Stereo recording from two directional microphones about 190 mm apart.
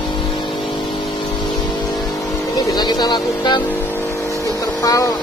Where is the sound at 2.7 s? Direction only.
20° left (ahead or behind).